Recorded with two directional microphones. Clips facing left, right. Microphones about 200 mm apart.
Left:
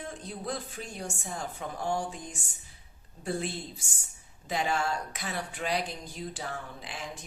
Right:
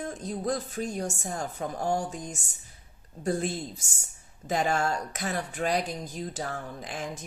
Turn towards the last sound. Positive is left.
turn(degrees=-45)  # may be behind; listen again after turning